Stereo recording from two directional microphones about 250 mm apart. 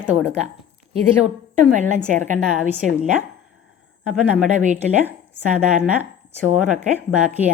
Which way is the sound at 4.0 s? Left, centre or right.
Centre.